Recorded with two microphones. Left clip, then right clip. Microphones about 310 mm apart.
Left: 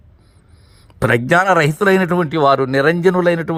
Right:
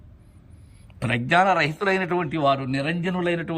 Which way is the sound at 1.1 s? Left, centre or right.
Centre.